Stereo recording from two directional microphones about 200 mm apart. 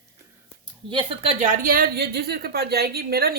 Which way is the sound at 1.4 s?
40° right (ahead or behind).